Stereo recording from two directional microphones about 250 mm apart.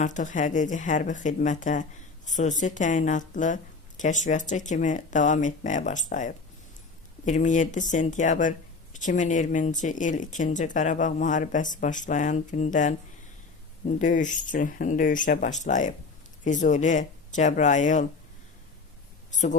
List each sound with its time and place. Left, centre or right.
0.0 s speech: left
14.0 s speech: left
19.3 s speech: left